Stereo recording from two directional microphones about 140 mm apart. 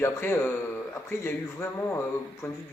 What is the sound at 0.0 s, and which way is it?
Speech, 15° left (ahead or behind).